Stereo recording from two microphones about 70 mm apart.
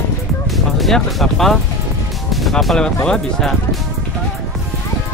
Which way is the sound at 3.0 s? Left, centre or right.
Centre.